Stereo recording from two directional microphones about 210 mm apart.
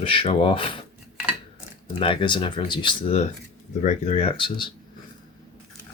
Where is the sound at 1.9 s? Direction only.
25° left (ahead or behind).